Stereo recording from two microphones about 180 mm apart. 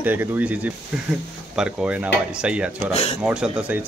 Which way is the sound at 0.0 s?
10° right (ahead or behind).